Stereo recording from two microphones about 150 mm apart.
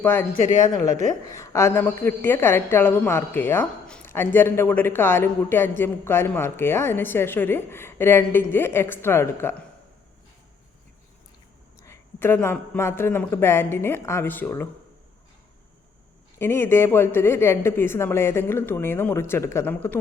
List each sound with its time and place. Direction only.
0.0 s a woman's voice: 15° left (ahead or behind)
0.3 s speech: 55° left (ahead or behind)
1.3 s a woman's voice: 20° left (ahead or behind)
11.8 s a woman's voice: 15° left (ahead or behind)
16.4 s a woman's voice: 15° left (ahead or behind)